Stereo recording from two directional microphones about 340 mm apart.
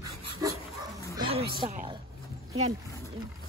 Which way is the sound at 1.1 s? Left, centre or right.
Centre.